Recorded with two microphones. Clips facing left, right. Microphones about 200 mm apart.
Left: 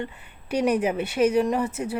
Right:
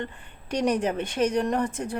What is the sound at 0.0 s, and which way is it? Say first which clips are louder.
Speech: left 1 dB; 10° left (ahead or behind).